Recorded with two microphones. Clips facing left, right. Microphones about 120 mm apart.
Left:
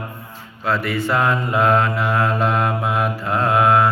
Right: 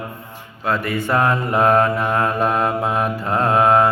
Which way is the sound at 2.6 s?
30° right (ahead or behind).